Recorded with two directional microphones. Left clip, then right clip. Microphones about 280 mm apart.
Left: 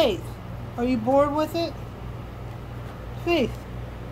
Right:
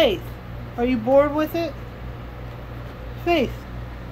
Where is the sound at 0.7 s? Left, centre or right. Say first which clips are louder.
Right 3 dB; centre.